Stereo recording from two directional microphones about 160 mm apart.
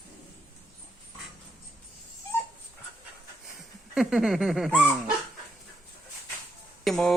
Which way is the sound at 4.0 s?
Centre (ahead or behind).